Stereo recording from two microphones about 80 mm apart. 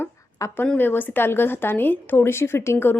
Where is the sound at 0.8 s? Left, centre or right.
Left.